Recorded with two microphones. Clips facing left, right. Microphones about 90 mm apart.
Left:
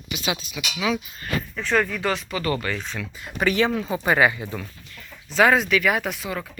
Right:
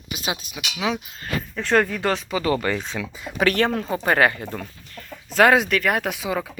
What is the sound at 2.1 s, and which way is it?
Speech, 20° right (ahead or behind).